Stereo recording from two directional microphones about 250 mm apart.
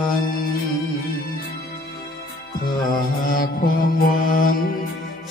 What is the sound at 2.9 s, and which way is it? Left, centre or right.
Music, left.